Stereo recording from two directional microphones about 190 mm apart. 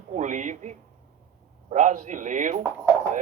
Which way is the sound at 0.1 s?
40° right (ahead or behind).